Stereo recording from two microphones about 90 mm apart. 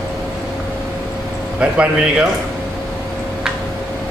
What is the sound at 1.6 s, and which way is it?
Speech, 15° right (ahead or behind).